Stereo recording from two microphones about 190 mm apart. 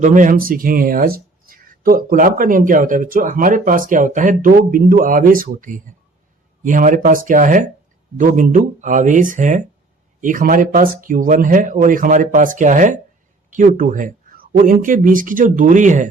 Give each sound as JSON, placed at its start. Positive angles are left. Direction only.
{"t": 0.0, "sound": "speech", "side_deg": -45}